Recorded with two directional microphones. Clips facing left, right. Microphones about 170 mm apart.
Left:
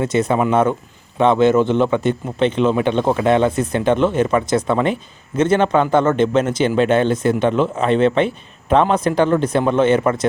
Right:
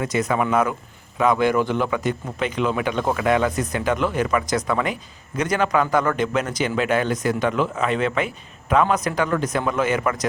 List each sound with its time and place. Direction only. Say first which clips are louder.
0.0 s a man's voice: left 5 dB; 30° left (ahead or behind)